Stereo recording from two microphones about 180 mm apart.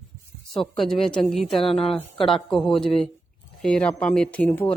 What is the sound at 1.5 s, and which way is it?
Speech, 30° left (ahead or behind).